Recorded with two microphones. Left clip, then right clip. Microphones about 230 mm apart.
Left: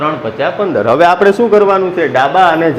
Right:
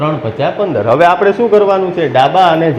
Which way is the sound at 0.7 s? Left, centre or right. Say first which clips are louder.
Left 1 dB; left.